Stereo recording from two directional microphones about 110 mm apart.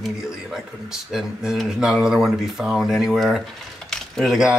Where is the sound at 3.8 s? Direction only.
Centre (ahead or behind).